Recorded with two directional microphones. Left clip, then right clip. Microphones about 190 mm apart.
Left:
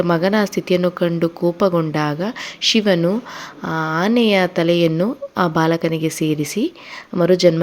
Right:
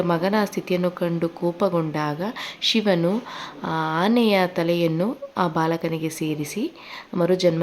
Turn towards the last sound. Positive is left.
turn(degrees=20)  # may be behind; listen again after turning